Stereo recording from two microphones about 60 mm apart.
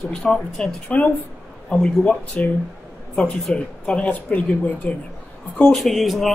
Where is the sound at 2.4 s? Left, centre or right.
Left.